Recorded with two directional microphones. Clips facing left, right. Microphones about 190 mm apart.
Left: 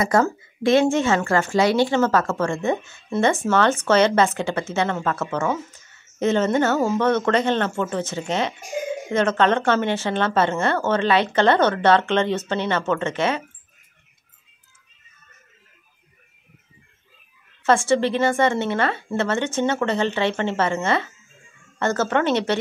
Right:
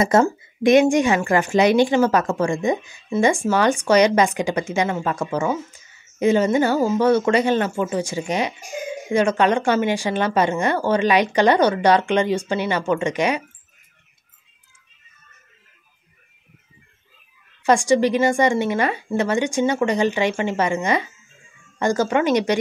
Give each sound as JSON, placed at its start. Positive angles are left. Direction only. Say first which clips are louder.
{"t": 0.0, "sound": "a woman's voice", "louder": "right 3 dB", "side_deg": -25}
{"t": 17.6, "sound": "a woman's voice", "louder": "right 2 dB", "side_deg": -15}